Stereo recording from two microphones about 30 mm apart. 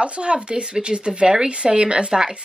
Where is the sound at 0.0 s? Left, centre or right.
Right.